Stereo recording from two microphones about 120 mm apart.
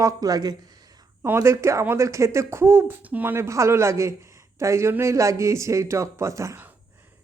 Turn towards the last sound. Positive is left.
turn(degrees=-25)  # may be behind; listen again after turning